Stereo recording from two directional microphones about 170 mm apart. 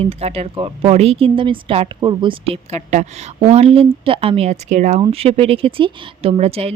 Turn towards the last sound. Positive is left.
turn(degrees=-35)  # may be behind; listen again after turning